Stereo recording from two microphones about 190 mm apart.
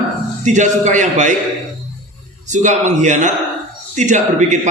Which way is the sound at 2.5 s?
40° right (ahead or behind).